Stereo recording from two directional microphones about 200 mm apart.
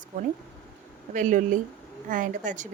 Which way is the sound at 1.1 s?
40° right (ahead or behind).